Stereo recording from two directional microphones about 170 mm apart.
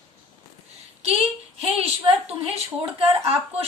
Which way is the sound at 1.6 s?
35° right (ahead or behind).